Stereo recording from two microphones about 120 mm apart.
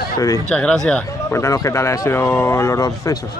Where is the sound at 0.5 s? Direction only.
5° left (ahead or behind).